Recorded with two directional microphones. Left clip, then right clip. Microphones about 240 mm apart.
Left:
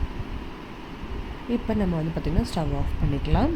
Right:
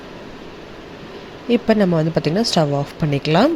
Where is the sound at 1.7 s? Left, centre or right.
Centre.